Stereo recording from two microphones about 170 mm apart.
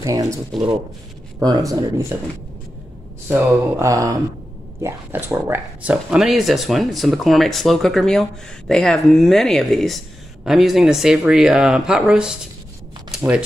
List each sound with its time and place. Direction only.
0.0 s speech: 20° right (ahead or behind)
3.8 s speech: 20° right (ahead or behind)